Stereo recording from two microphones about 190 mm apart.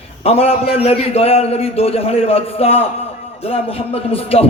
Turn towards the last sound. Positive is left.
turn(degrees=30)  # may be behind; listen again after turning